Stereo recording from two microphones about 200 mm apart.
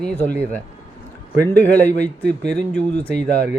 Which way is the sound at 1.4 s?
10° left (ahead or behind).